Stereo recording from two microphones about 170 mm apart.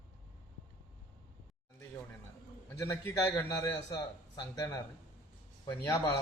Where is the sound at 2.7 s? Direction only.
20° left (ahead or behind).